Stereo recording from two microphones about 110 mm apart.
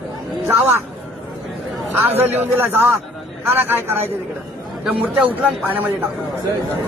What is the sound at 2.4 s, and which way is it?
Speech, 20° right (ahead or behind).